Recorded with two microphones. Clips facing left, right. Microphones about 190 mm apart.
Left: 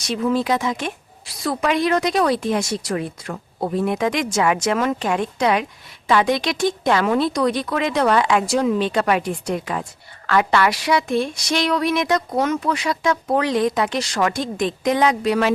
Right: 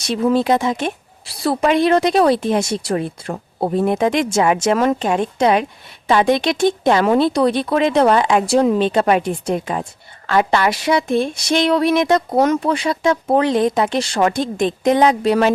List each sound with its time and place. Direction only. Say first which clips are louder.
0.1 s speech: right 4 dB; 35° right (ahead or behind)
8.8 s speech: right 4 dB; 25° right (ahead or behind)